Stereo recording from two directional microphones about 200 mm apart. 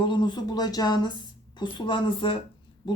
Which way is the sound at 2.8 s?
25° left (ahead or behind).